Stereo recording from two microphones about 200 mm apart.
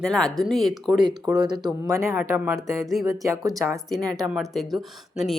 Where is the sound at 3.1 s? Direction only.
15° right (ahead or behind).